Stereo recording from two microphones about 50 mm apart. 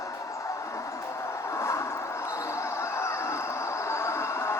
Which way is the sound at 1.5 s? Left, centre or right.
Left.